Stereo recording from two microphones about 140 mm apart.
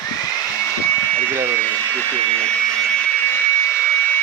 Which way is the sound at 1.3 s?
15° right (ahead or behind).